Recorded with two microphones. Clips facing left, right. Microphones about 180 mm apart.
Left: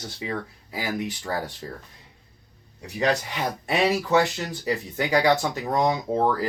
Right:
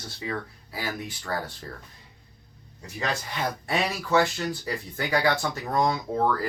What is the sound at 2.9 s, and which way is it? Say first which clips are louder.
Speech: left 6 dB; 20° left (ahead or behind).